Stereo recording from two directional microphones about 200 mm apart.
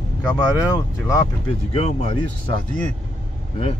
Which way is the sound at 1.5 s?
30° left (ahead or behind).